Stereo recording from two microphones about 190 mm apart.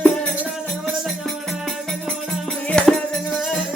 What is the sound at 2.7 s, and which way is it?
Music, 5° left (ahead or behind).